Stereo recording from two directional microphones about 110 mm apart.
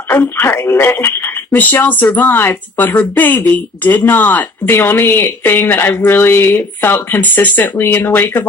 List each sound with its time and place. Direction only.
0.1 s speech: 20° left (ahead or behind)